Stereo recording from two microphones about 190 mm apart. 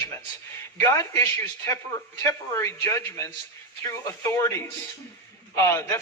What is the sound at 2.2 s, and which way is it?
A man's voice, 15° left (ahead or behind).